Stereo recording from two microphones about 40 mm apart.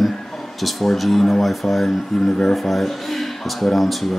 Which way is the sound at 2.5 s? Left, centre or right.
Centre.